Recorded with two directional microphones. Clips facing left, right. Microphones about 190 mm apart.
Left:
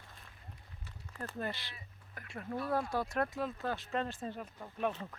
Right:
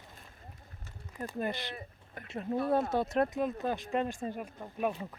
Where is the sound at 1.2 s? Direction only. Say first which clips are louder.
Right 5 dB; 15° right (ahead or behind).